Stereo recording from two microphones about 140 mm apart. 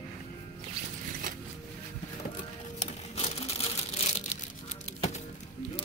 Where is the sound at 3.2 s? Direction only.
45° left (ahead or behind).